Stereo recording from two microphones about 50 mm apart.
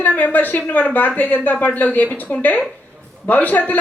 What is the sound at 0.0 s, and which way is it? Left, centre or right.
A woman's voice, left.